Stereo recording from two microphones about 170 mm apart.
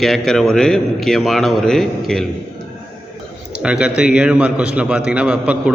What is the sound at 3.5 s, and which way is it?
A man's voice, 5° right (ahead or behind).